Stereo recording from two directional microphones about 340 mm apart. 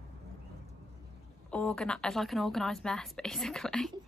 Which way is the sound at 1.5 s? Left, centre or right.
Centre.